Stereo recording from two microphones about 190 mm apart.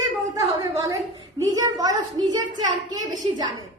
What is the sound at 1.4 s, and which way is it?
Speech, 20° right (ahead or behind).